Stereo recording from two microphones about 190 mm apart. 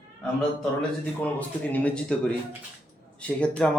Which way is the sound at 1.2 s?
10° left (ahead or behind).